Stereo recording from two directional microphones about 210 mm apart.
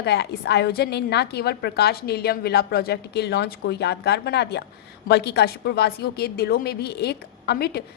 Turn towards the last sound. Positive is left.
turn(degrees=50)  # may be behind; listen again after turning